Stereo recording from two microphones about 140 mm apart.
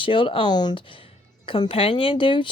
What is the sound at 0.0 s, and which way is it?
Speech, 40° left (ahead or behind).